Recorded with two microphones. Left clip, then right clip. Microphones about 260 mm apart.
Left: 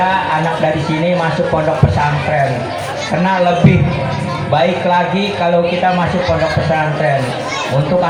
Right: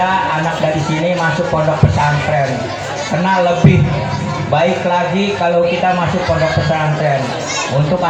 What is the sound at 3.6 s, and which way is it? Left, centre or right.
Speech, left.